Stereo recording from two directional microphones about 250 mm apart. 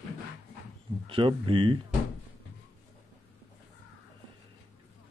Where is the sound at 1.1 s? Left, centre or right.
Centre.